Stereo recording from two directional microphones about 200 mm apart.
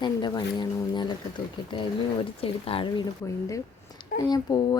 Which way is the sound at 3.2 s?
15° left (ahead or behind).